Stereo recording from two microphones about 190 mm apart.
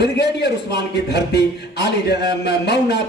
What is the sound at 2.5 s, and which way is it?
Speech, 60° left (ahead or behind).